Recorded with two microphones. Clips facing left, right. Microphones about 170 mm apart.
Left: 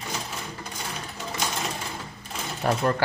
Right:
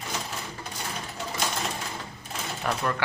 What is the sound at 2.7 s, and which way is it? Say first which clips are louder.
Speech: left 5 dB; 35° left (ahead or behind).